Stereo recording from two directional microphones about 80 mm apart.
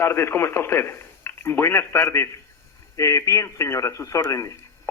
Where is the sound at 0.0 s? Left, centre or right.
Left.